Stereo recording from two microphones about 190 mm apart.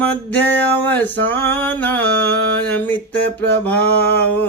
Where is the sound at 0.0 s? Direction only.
10° left (ahead or behind).